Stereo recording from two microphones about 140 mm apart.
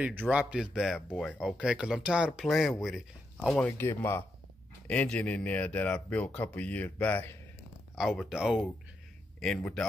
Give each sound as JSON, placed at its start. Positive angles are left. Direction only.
{"t": 0.3, "sound": "speech", "side_deg": -10}
{"t": 1.4, "sound": "speech", "side_deg": -5}
{"t": 3.5, "sound": "speech", "side_deg": 15}
{"t": 7.9, "sound": "speech", "side_deg": 0}